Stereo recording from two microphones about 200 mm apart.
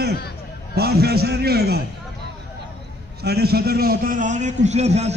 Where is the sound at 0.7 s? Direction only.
50° right (ahead or behind).